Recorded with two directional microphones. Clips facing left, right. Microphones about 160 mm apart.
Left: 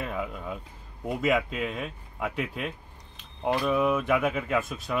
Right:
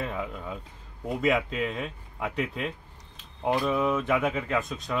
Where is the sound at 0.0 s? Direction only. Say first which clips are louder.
Even; 5° left (ahead or behind).